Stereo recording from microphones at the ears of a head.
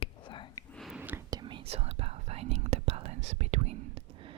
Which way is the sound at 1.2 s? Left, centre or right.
Right.